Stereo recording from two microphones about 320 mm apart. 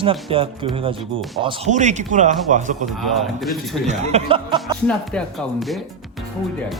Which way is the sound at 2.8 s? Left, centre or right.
Centre.